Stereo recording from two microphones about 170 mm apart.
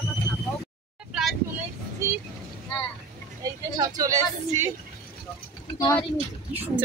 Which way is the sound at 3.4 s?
20° right (ahead or behind).